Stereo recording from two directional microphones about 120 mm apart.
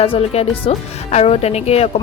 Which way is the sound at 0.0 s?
55° left (ahead or behind).